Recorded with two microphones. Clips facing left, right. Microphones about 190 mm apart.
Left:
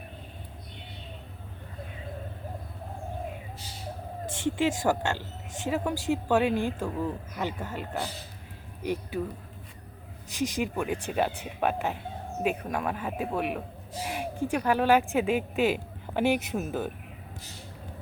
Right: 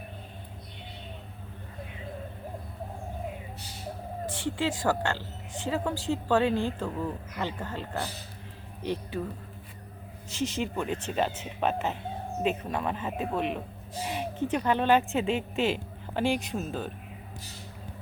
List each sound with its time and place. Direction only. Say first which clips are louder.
4.4 s a woman's voice: left 4 dB; 20° left (ahead or behind)
10.3 s a woman's voice: left 1 dB; 15° left (ahead or behind)
14.0 s a sound: right 1 dB; 10° left (ahead or behind)
14.5 s a woman's voice: left 1 dB; 5° left (ahead or behind)